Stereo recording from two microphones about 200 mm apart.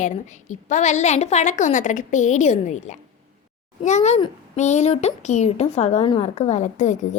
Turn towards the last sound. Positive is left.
turn(degrees=35)  # may be behind; listen again after turning